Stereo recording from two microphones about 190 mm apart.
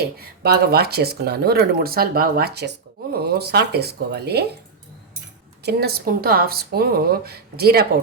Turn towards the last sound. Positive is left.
turn(degrees=-55)  # may be behind; listen again after turning